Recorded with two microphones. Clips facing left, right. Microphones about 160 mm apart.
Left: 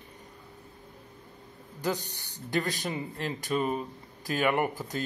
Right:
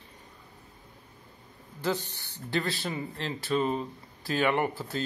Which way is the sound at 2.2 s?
40° left (ahead or behind).